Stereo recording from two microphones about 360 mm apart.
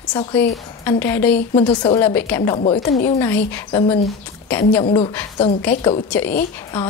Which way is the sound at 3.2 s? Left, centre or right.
Centre.